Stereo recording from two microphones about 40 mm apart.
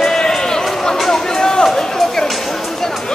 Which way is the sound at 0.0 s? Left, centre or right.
Centre.